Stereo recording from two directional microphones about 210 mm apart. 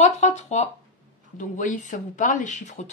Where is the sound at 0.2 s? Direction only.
35° left (ahead or behind).